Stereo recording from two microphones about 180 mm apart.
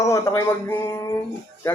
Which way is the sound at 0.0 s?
15° left (ahead or behind).